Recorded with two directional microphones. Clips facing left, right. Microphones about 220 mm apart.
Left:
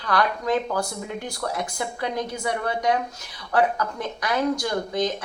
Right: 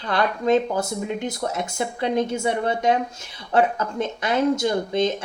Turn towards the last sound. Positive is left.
turn(degrees=-25)  # may be behind; listen again after turning